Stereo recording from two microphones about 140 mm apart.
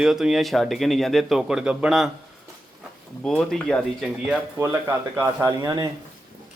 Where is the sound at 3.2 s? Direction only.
5° left (ahead or behind).